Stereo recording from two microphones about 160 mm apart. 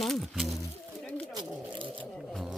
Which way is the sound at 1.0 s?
10° left (ahead or behind).